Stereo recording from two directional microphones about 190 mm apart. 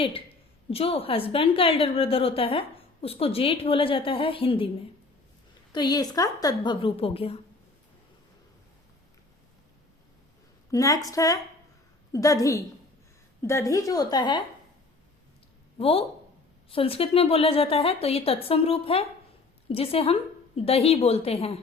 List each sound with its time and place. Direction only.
0.7 s a woman's voice: 30° left (ahead or behind)
5.7 s a woman's voice: 20° left (ahead or behind)
10.7 s a woman's voice: 20° left (ahead or behind)
15.8 s a woman's voice: 30° left (ahead or behind)